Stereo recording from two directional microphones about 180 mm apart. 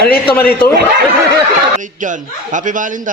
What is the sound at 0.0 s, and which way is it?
Speech, 55° left (ahead or behind).